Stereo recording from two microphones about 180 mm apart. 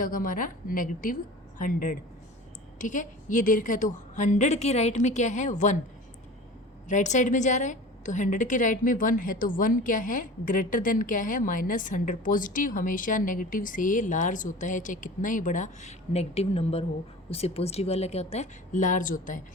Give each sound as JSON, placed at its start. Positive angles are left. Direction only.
{"t": 0.0, "sound": "a woman's voice", "side_deg": 50}
{"t": 6.8, "sound": "a woman's voice", "side_deg": 45}